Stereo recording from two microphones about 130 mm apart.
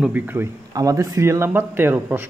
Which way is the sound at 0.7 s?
25° right (ahead or behind).